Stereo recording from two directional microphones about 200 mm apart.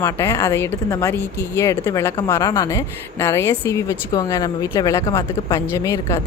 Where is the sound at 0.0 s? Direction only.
15° left (ahead or behind).